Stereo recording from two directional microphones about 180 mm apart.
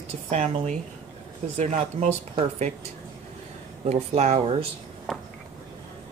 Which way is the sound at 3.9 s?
40° right (ahead or behind).